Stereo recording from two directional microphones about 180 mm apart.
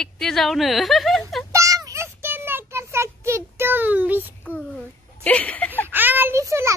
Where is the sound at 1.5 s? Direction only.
20° right (ahead or behind).